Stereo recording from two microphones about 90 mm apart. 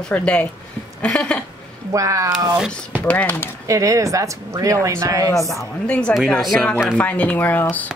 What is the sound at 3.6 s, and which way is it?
Speech, 40° right (ahead or behind).